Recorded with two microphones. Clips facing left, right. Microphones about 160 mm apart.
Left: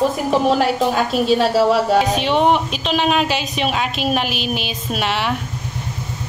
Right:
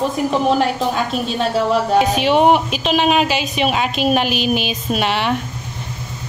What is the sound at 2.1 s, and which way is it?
A woman's voice, 5° right (ahead or behind).